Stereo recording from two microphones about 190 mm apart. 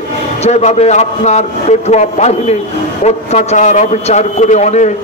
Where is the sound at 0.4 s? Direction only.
35° left (ahead or behind).